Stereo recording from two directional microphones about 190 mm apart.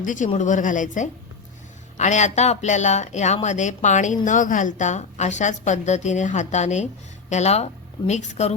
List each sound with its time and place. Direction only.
0.0 s a woman's voice: 40° left (ahead or behind)